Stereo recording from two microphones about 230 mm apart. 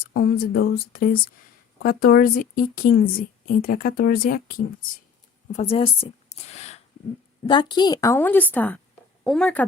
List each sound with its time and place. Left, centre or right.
0.1 s a woman's voice: left
5.5 s a woman's voice: left; by 9.6 s centre